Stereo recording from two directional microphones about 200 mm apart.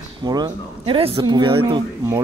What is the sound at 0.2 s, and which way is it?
Speech, 20° right (ahead or behind).